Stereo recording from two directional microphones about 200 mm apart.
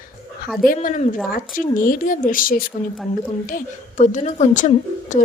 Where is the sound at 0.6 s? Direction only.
40° left (ahead or behind).